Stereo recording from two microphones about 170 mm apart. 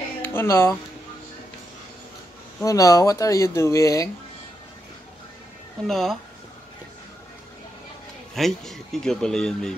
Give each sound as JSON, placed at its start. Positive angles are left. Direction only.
{"t": 0.2, "sound": "speech", "side_deg": 15}
{"t": 2.6, "sound": "speech", "side_deg": 20}
{"t": 5.9, "sound": "speech", "side_deg": 0}
{"t": 8.4, "sound": "speech", "side_deg": 0}